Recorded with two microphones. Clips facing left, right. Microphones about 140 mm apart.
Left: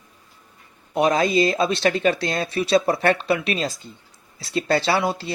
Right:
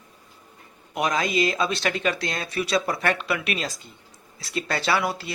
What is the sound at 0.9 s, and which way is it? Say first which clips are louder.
Speech: left 5 dB; 30° left (ahead or behind).